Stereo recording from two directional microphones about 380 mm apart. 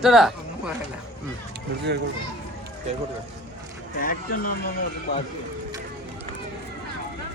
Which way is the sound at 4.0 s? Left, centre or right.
Left.